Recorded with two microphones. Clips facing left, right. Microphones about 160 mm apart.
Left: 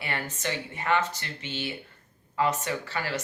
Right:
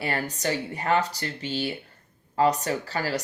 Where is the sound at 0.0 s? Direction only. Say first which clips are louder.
Right 5 dB; 35° right (ahead or behind).